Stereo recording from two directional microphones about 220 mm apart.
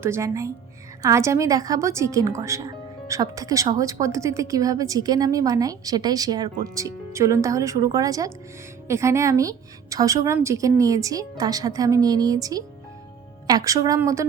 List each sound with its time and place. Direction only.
0.0 s speech: 10° right (ahead or behind)